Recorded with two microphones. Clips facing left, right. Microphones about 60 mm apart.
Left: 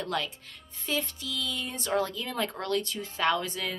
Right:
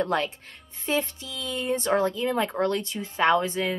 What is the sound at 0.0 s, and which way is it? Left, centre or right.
Speech, right.